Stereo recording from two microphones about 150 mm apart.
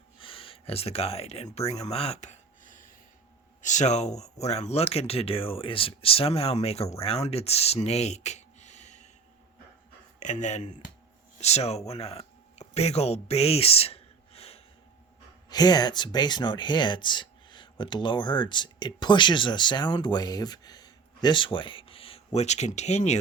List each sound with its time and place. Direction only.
0.2 s speech: 35° left (ahead or behind)
10.2 s speech: 55° left (ahead or behind)
15.4 s speech: 25° left (ahead or behind); by 23.2 s 50° left (ahead or behind)